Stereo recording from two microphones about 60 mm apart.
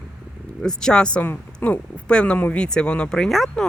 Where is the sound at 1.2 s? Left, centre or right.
Left.